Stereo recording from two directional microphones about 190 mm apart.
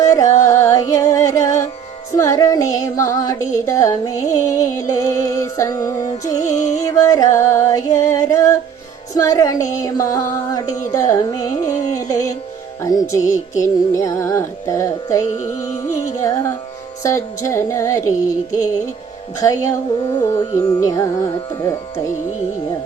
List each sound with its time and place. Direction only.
0.0 s music: 15° left (ahead or behind)
17.0 s music: 15° left (ahead or behind)
19.4 s music: 20° left (ahead or behind)